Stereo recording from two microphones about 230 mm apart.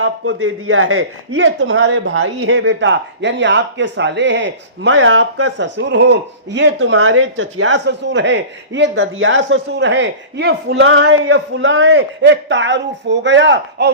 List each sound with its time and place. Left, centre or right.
0.0 s a man's voice: right